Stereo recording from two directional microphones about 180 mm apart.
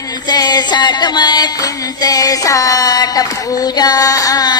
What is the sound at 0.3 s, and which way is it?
Music, 20° left (ahead or behind).